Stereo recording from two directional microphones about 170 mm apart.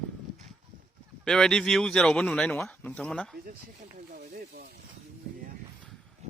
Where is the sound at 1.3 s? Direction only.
5° left (ahead or behind).